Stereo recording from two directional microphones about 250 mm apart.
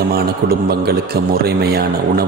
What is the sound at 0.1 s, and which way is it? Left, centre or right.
Speech, right.